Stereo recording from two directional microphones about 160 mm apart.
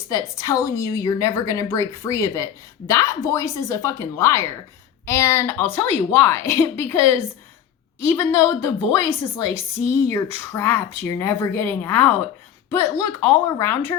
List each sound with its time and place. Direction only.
0.1 s a woman's voice: 20° left (ahead or behind)
13.1 s a woman's voice: 20° left (ahead or behind)